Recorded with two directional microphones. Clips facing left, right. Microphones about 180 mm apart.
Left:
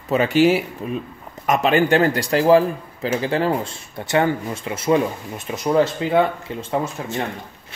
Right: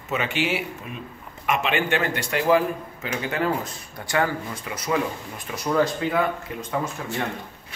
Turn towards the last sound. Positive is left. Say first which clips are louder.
# left 4 dB
turn(degrees=30)  # may be behind; listen again after turning